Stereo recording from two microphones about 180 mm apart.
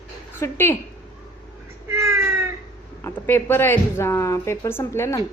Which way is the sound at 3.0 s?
10° left (ahead or behind).